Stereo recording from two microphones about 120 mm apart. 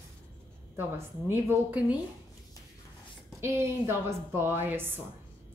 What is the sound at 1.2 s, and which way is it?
Speech, 15° right (ahead or behind).